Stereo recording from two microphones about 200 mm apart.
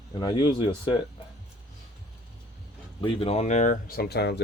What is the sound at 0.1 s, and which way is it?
Speech, 20° left (ahead or behind).